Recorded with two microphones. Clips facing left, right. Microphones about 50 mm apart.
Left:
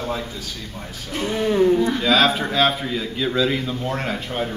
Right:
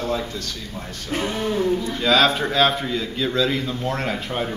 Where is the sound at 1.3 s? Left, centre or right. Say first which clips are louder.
Left 6 dB; centre.